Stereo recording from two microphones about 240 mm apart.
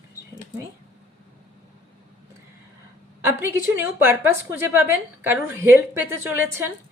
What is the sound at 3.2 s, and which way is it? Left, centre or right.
A woman's voice, centre.